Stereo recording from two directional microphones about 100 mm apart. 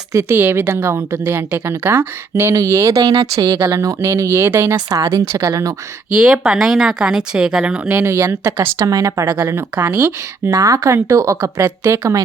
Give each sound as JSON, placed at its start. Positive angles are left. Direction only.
{"t": 0.1, "sound": "a woman's voice", "side_deg": -35}
{"t": 0.3, "sound": "a woman's voice", "side_deg": -20}
{"t": 6.1, "sound": "speech", "side_deg": -10}
{"t": 7.9, "sound": "a woman's voice", "side_deg": -25}